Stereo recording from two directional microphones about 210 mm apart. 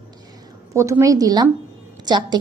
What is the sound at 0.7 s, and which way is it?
A woman's voice, 15° right (ahead or behind).